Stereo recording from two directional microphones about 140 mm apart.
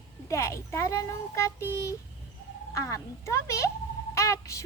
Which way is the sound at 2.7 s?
20° left (ahead or behind).